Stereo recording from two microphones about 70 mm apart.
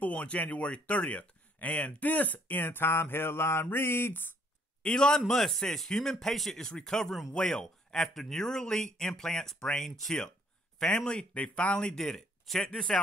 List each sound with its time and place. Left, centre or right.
0.0 s speech: left
3.7 s a sound: left
4.8 s speech: centre